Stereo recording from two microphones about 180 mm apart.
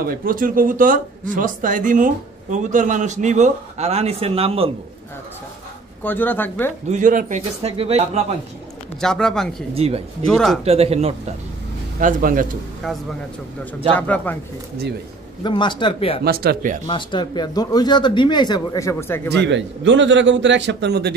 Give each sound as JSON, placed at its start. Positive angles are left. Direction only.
{"t": 0.0, "sound": "speech", "side_deg": -55}
{"t": 6.0, "sound": "speech", "side_deg": 10}
{"t": 6.9, "sound": "a man's voice", "side_deg": -45}
{"t": 9.0, "sound": "speech", "side_deg": 5}
{"t": 9.8, "sound": "a man's voice", "side_deg": -35}
{"t": 10.2, "sound": "speech", "side_deg": 0}
{"t": 10.6, "sound": "a man's voice", "side_deg": -35}
{"t": 12.0, "sound": "speech", "side_deg": -50}
{"t": 13.9, "sound": "speech", "side_deg": 10}
{"t": 15.4, "sound": "speech", "side_deg": 25}
{"t": 16.3, "sound": "speech", "side_deg": -60}
{"t": 16.8, "sound": "speech", "side_deg": 25}
{"t": 19.3, "sound": "a man's voice", "side_deg": -80}